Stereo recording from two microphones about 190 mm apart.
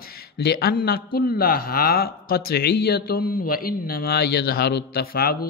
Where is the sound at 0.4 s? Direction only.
55° left (ahead or behind).